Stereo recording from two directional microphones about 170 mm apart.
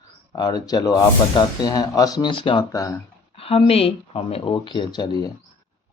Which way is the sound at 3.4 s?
35° left (ahead or behind).